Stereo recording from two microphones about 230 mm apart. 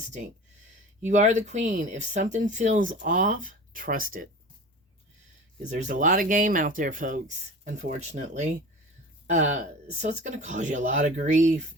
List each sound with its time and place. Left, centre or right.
1.0 s speech: right
5.6 s speech: right